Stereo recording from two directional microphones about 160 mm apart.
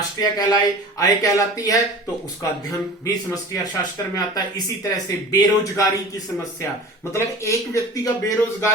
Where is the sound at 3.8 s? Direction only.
25° left (ahead or behind).